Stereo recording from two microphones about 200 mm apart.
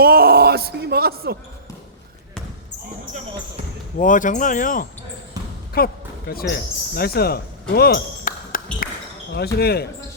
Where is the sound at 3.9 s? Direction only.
40° left (ahead or behind).